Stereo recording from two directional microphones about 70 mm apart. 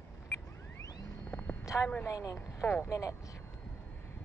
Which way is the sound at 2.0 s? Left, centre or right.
Left.